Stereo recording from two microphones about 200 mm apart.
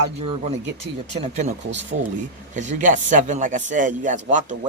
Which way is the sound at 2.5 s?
35° right (ahead or behind).